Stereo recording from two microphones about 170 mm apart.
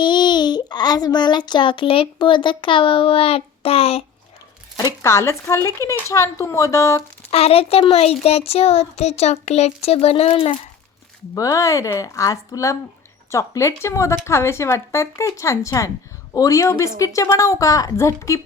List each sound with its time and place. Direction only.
0.0 s a child's voice: 25° left (ahead or behind)
5.0 s speech: 15° left (ahead or behind)
7.2 s speech: 35° left (ahead or behind)
11.3 s a child's voice: 20° left (ahead or behind)